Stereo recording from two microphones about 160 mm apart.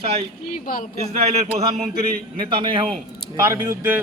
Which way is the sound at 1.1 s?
40° right (ahead or behind).